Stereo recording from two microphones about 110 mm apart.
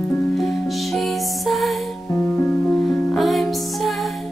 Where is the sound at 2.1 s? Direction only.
20° left (ahead or behind).